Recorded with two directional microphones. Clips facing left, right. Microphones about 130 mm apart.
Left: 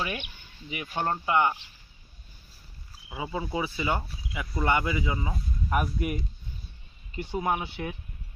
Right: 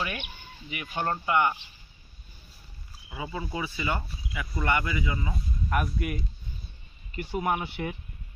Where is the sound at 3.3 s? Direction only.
20° left (ahead or behind).